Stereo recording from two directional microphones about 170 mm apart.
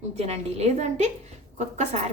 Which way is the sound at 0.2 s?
40° right (ahead or behind).